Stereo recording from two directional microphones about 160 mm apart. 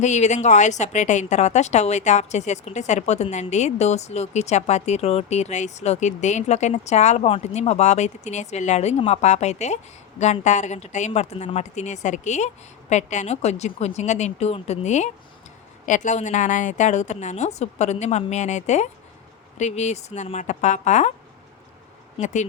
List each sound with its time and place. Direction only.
0.0 s a woman's voice: 45° left (ahead or behind)
22.2 s a woman's voice: 50° left (ahead or behind)